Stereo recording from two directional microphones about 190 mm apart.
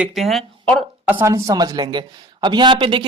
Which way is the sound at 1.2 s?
15° right (ahead or behind).